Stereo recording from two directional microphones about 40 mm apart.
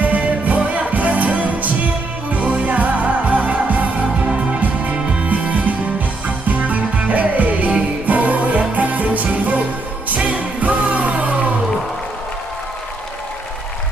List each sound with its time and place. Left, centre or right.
0.4 s music: right